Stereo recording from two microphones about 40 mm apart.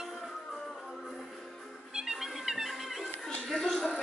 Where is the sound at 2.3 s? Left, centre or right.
Centre.